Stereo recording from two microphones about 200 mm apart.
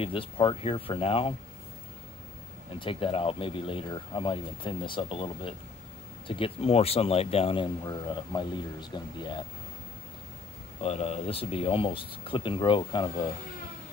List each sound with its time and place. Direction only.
0.0 s speech: 25° left (ahead or behind)
2.8 s speech: 25° left (ahead or behind)
10.8 s speech: 30° left (ahead or behind)